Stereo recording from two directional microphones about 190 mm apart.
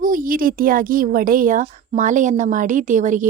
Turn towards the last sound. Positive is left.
turn(degrees=-40)  # may be behind; listen again after turning